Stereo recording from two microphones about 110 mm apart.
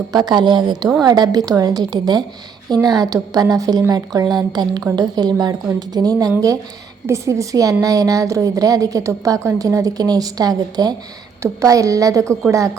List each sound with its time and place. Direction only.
0.1 s a woman's voice: 40° right (ahead or behind)